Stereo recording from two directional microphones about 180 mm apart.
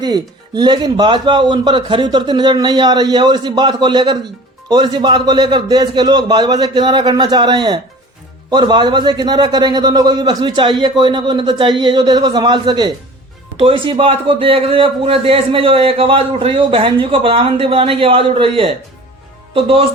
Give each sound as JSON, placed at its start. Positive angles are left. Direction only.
{"t": 0.0, "sound": "a man's voice", "side_deg": -25}